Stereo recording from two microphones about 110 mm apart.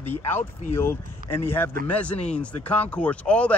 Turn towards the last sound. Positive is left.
turn(degrees=10)  # may be behind; listen again after turning